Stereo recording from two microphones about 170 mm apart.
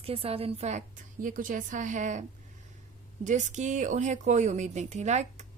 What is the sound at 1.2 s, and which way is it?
A woman's voice, 55° right (ahead or behind).